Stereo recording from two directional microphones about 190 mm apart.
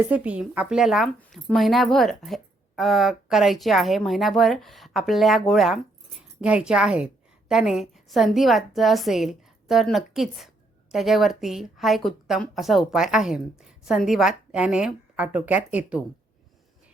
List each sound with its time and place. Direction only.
0.0 s a woman's voice: 5° right (ahead or behind)